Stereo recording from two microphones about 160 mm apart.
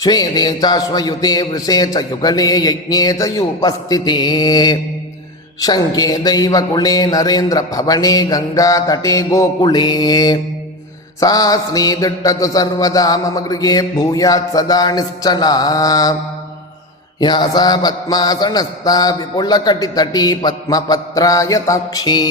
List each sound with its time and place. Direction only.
0.0 s mantra: 25° left (ahead or behind)
17.2 s mantra: 25° left (ahead or behind)